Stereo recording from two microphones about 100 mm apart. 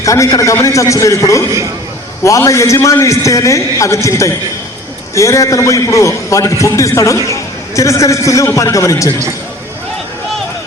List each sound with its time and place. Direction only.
0.0 s a man's voice: 30° left (ahead or behind)